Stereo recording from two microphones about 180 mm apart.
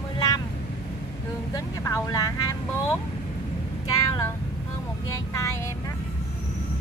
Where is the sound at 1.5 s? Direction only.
20° left (ahead or behind).